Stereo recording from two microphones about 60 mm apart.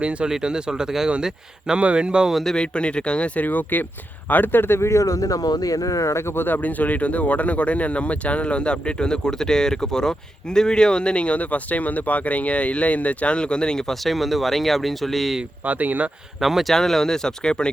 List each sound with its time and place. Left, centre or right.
0.0 s speech: centre
2.3 s speech: centre
2.6 s speech: centre
3.4 s speech: left
4.8 s speech: left; by 15.4 s centre
15.6 s speech: right
16.4 s speech: centre